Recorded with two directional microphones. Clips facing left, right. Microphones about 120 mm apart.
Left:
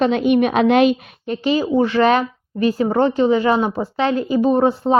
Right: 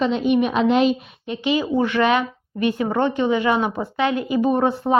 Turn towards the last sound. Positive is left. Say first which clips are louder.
# left 3 dB
turn(degrees=25)  # may be behind; listen again after turning